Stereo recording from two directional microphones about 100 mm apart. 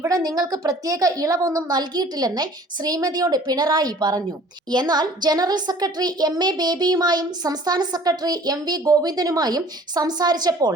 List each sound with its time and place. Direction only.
0.0 s a woman's voice: 35° right (ahead or behind)